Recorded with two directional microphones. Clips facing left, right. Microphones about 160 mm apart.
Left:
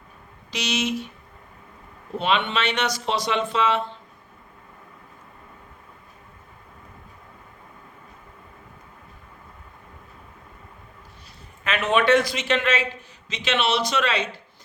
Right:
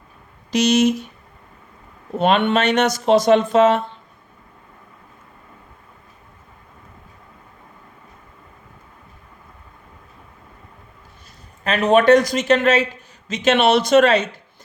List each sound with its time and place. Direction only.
0.5 s a man's voice: 45° right (ahead or behind)
2.1 s a man's voice: 50° right (ahead or behind)
11.6 s a man's voice: 40° right (ahead or behind)